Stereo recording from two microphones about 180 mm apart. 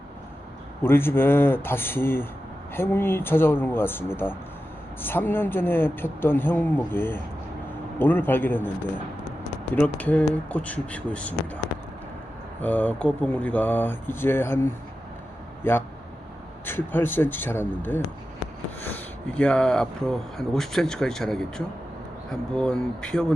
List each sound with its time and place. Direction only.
0.8 s a man's voice: 10° left (ahead or behind)
9.7 s a man's voice: 10° left (ahead or behind)
12.6 s a man's voice: 10° left (ahead or behind)